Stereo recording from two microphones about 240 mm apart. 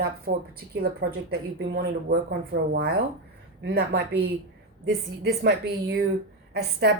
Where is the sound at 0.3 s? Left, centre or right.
Right.